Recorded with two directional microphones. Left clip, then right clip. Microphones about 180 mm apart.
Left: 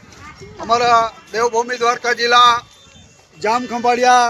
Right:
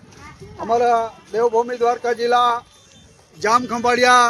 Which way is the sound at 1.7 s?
40° right (ahead or behind).